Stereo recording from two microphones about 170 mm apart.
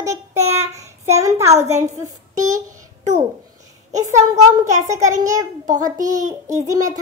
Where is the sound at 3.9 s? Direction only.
15° right (ahead or behind).